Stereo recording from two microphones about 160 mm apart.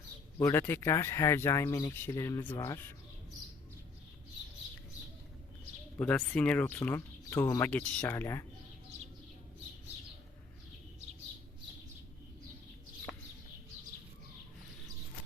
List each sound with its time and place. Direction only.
0.3 s speech: 15° left (ahead or behind)
6.0 s speech: 10° left (ahead or behind)